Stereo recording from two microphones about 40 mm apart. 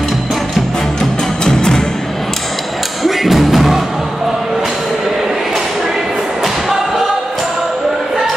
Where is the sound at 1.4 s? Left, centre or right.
Centre.